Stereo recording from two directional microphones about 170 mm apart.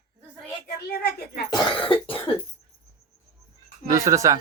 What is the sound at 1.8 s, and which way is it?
Cough, 35° left (ahead or behind).